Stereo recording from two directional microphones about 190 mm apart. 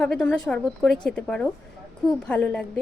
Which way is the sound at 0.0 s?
5° left (ahead or behind).